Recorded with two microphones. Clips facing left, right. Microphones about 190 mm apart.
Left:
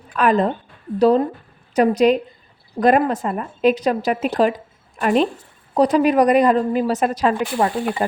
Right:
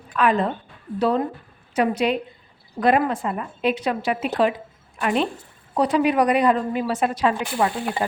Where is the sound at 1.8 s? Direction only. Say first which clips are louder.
Left 6 dB; 40° left (ahead or behind).